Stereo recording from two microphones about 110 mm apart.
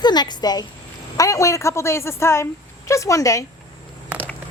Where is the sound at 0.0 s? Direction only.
40° left (ahead or behind).